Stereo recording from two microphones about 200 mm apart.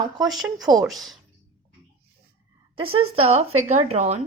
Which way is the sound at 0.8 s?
Centre (ahead or behind).